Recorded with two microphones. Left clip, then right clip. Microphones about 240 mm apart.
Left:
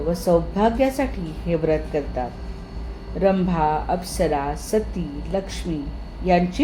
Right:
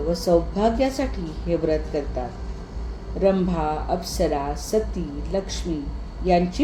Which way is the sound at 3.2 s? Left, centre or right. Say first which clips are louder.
Left 1 dB; left.